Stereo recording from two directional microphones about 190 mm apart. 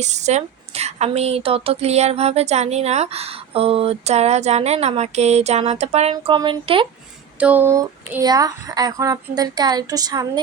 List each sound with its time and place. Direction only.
0.0 s a woman's voice: 35° right (ahead or behind)
7.3 s speech: 10° right (ahead or behind)